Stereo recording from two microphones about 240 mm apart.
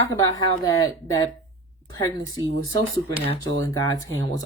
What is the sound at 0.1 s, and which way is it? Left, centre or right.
Speech, centre.